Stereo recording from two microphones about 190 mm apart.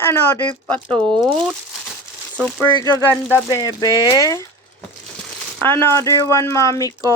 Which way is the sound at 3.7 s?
20° left (ahead or behind).